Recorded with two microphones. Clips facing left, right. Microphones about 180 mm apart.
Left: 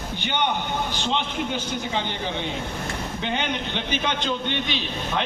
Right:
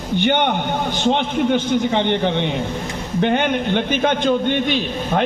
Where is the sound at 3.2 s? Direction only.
55° right (ahead or behind).